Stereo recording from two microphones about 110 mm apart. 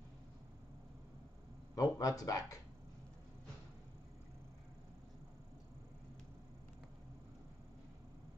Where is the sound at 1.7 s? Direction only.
35° left (ahead or behind).